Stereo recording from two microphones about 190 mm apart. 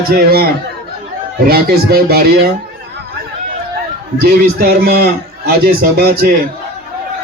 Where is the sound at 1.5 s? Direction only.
55° right (ahead or behind).